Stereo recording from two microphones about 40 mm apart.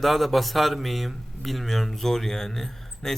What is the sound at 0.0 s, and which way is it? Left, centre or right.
Speech, centre.